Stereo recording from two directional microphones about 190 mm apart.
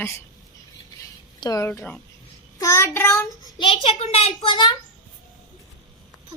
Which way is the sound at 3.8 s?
35° left (ahead or behind).